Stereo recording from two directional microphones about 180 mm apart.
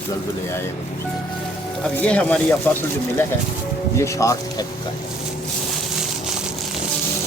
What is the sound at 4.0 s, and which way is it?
Speech, 15° left (ahead or behind).